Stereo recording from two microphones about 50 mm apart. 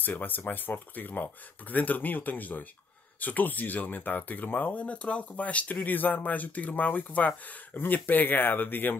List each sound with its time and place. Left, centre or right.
0.0 s speech: left